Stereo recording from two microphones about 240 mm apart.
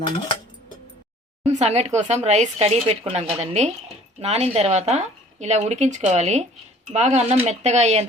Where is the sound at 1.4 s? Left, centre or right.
Right.